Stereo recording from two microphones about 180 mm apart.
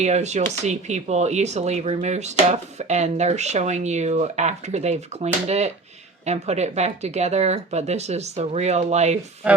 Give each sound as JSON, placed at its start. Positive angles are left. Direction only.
{"t": 0.0, "sound": "speech", "side_deg": -40}